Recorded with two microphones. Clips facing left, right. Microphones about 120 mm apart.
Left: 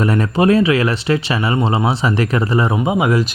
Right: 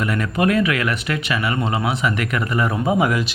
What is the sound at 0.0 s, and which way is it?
Speech, 35° left (ahead or behind).